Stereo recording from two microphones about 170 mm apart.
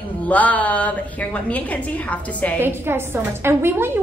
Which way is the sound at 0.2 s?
10° left (ahead or behind).